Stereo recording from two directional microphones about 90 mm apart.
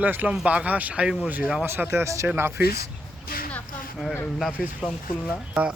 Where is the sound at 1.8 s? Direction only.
30° right (ahead or behind).